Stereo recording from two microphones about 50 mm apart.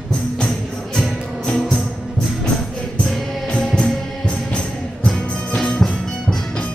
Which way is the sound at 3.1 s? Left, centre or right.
Centre.